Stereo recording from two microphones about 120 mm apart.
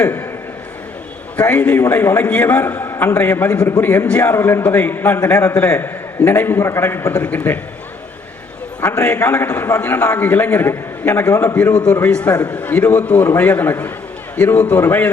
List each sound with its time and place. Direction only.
0.0 s a man's voice: 15° left (ahead or behind)
1.4 s a man's voice: 10° left (ahead or behind)
8.8 s a man's voice: 20° left (ahead or behind)
12.0 s a man's voice: 10° left (ahead or behind)